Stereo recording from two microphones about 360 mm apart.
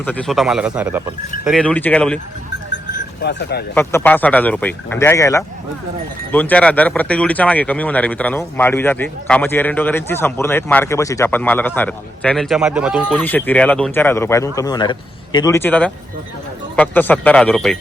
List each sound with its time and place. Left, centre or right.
0.0 s speech: centre
3.2 s speech: left
3.8 s speech: centre